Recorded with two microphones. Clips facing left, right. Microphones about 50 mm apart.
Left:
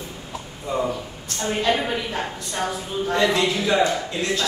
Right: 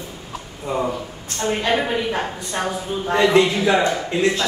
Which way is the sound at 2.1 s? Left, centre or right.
Right.